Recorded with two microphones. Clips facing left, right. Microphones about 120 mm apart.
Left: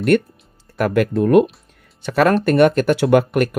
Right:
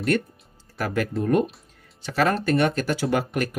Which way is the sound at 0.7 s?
65° left (ahead or behind).